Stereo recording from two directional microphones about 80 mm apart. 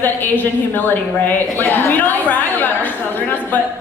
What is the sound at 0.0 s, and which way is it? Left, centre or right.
A woman's voice, left.